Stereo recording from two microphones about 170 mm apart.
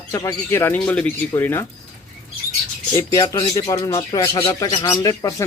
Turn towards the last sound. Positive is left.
turn(degrees=20)  # may be behind; listen again after turning